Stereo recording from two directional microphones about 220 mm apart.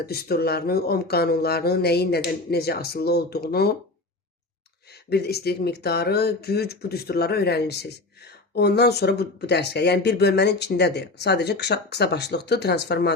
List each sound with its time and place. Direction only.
0.0 s speech: 45° left (ahead or behind)
4.9 s speech: 45° left (ahead or behind)